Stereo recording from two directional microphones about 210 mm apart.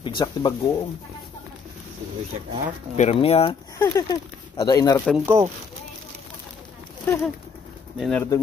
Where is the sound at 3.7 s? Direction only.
15° left (ahead or behind).